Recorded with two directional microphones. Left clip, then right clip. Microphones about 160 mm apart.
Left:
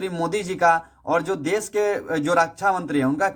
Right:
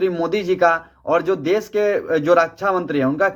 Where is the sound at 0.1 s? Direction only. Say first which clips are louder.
Right 5 dB; 30° left (ahead or behind).